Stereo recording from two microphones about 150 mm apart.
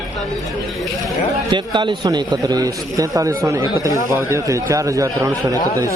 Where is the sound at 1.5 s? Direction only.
30° right (ahead or behind).